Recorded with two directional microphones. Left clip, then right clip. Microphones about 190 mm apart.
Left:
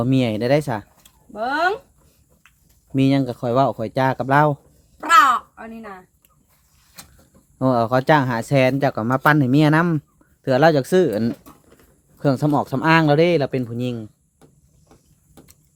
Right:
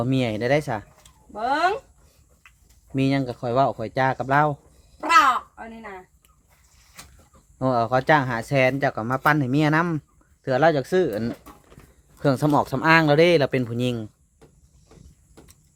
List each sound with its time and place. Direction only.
0.0 s speech: 15° left (ahead or behind)
1.3 s speech: 30° left (ahead or behind)
2.9 s speech: 15° left (ahead or behind)
4.9 s a sound: 35° left (ahead or behind)
7.6 s speech: 20° left (ahead or behind)
12.2 s speech: centre (ahead or behind); by 14.1 s 20° right (ahead or behind)